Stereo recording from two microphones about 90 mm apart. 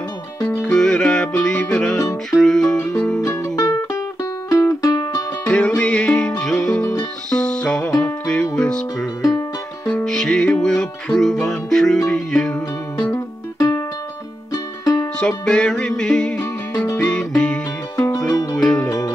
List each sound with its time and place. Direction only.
0.7 s music: 10° left (ahead or behind)
2.8 s music: 35° left (ahead or behind)
5.4 s music: 15° left (ahead or behind)
9.2 s music: 40° left (ahead or behind)
9.8 s music: 10° left (ahead or behind)
13.1 s music: 30° left (ahead or behind)
15.1 s music: 10° left (ahead or behind)
18.1 s music: 40° left (ahead or behind)
18.6 s music: 10° left (ahead or behind)
18.9 s music: 40° left (ahead or behind)